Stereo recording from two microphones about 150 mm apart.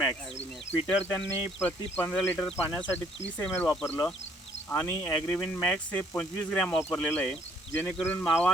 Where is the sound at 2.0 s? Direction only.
10° left (ahead or behind).